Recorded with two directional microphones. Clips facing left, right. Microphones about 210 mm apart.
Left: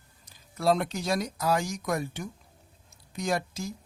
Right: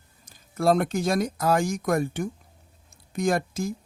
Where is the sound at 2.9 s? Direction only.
50° right (ahead or behind).